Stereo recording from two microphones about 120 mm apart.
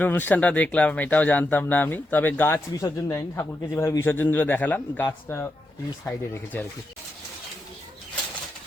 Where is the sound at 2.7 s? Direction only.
25° left (ahead or behind).